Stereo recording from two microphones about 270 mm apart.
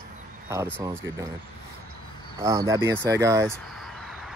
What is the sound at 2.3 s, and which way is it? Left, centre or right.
Speech, centre.